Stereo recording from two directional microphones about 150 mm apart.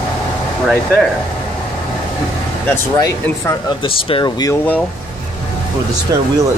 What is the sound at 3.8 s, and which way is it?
Speech, 35° left (ahead or behind).